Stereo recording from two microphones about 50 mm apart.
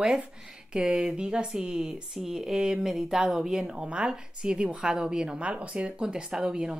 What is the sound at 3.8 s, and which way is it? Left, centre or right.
A woman's voice, right.